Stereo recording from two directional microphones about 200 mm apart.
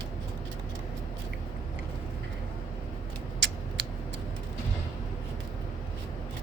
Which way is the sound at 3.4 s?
65° right (ahead or behind).